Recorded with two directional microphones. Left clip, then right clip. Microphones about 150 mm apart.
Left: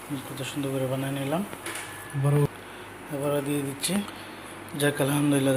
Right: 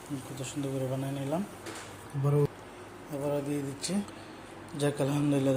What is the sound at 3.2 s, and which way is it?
Speech, 5° right (ahead or behind).